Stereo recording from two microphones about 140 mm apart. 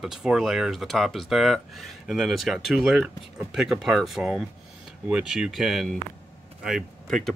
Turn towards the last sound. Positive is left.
turn(degrees=5)  # may be behind; listen again after turning